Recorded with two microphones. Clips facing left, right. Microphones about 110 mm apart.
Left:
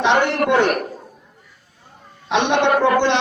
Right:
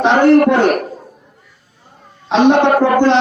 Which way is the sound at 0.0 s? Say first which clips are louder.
Right 8 dB; 40° right (ahead or behind).